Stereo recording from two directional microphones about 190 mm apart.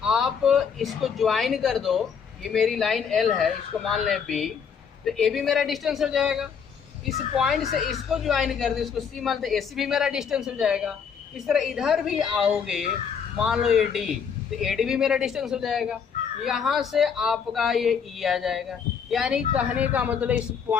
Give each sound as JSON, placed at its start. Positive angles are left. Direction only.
{"t": 0.0, "sound": "speech", "side_deg": 0}